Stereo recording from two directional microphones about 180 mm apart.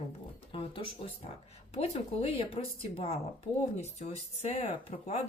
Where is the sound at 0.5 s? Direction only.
30° left (ahead or behind).